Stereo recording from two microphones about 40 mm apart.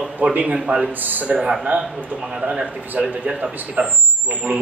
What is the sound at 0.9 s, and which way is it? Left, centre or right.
Speech, right.